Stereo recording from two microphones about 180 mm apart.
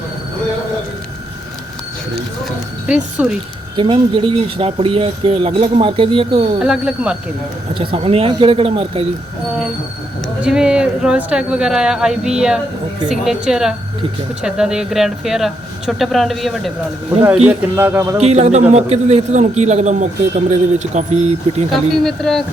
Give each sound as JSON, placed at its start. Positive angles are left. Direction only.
{"t": 2.4, "sound": "speech", "side_deg": -5}
{"t": 3.8, "sound": "speech", "side_deg": -30}
{"t": 6.6, "sound": "speech", "side_deg": -5}
{"t": 7.7, "sound": "speech", "side_deg": -30}
{"t": 10.4, "sound": "speech", "side_deg": -5}
{"t": 17.5, "sound": "a man's voice", "side_deg": -10}
{"t": 18.2, "sound": "speech", "side_deg": -35}
{"t": 21.7, "sound": "speech", "side_deg": 0}